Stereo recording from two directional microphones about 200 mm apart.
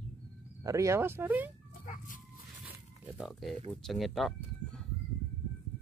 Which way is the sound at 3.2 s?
Centre (ahead or behind).